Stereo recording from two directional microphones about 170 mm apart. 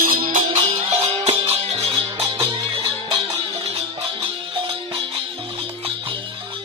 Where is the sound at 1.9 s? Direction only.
20° right (ahead or behind).